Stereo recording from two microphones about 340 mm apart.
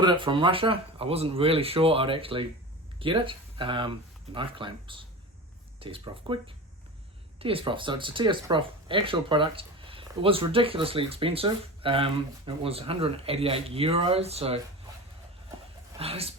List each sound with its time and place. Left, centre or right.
0.0 s speech: centre
16.0 s speech: centre